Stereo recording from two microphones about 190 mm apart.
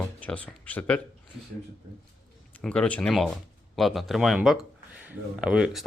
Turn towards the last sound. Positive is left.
turn(degrees=-5)  # may be behind; listen again after turning